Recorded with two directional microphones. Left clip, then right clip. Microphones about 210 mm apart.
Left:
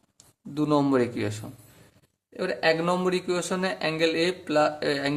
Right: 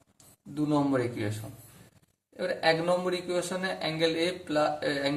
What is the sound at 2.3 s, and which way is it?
A man's voice, 45° left (ahead or behind).